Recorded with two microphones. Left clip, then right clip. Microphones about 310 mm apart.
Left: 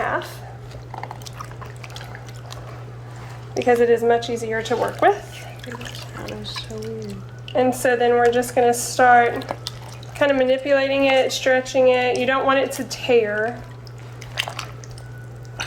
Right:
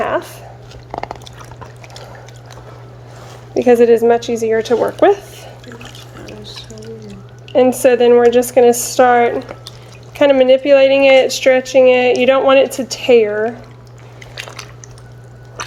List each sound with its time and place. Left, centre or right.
0.0 s a sound: right
3.6 s speech: right
7.5 s speech: right